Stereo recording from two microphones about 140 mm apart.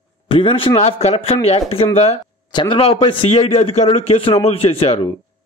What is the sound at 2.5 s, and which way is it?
Speech, 35° left (ahead or behind).